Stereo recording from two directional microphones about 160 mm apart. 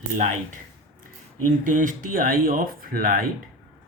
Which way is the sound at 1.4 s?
55° right (ahead or behind).